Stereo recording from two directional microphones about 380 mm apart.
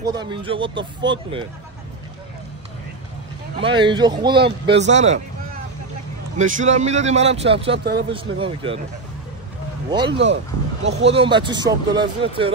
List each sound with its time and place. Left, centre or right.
0.0 s speech: centre
3.5 s speech: centre
6.3 s speech: centre
7.7 s speech: right
8.1 s speech: centre
9.8 s speech: centre
10.1 s speech: right
11.1 s speech: centre